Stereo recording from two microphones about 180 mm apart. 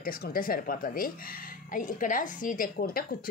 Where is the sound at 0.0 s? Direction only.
55° left (ahead or behind).